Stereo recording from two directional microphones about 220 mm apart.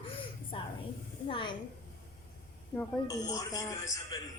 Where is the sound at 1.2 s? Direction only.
20° left (ahead or behind).